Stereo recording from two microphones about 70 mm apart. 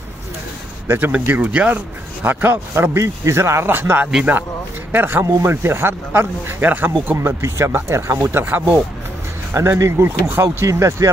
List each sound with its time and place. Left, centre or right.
0.8 s speech: right
2.2 s speech: right
5.2 s speech: right
5.5 s speech: right
7.2 s speech: right
10.7 s speech: right